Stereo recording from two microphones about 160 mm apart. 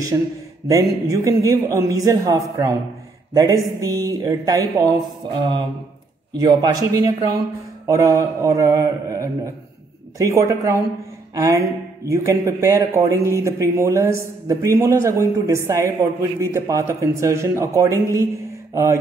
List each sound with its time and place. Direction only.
0.1 s a man's voice: 20° right (ahead or behind)
3.8 s a man's voice: 20° right (ahead or behind)
6.3 s a man's voice: 25° right (ahead or behind)